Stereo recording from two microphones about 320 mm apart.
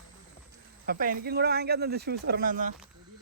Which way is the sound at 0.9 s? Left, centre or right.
Right.